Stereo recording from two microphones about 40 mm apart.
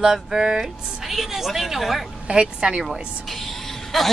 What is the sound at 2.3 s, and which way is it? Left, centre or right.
Speech, right.